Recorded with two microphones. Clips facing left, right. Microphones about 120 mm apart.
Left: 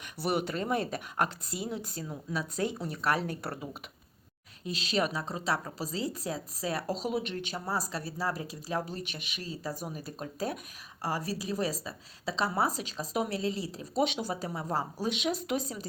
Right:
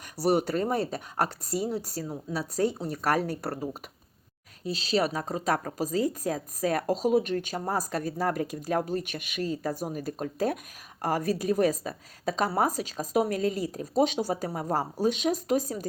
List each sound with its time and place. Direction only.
0.2 s speech: 40° right (ahead or behind)